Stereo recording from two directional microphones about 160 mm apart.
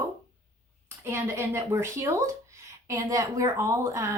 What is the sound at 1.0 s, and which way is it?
A woman's voice, 15° right (ahead or behind).